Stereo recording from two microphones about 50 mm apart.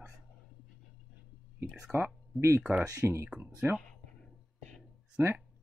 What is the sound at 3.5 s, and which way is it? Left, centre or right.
Speech, right.